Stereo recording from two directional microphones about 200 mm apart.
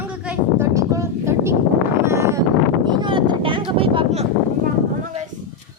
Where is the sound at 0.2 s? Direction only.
10° right (ahead or behind); by 4.3 s 30° right (ahead or behind).